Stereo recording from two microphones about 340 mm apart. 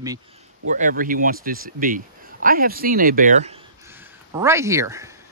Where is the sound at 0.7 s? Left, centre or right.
Right.